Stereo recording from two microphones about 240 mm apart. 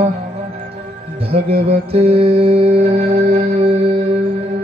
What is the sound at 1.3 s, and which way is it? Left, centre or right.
Music, right.